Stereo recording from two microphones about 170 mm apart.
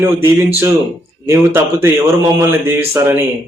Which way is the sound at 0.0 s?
15° right (ahead or behind).